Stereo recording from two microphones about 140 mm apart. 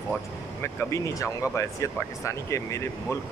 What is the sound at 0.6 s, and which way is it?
Speech, 20° left (ahead or behind).